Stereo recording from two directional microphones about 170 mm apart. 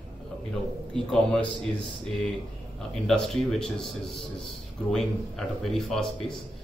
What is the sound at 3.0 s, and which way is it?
Speech, centre (ahead or behind).